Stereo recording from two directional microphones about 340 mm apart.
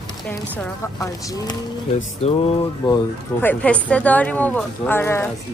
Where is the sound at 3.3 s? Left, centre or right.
Centre.